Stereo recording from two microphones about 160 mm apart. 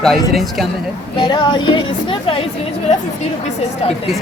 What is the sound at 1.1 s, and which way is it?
Speech, 30° left (ahead or behind).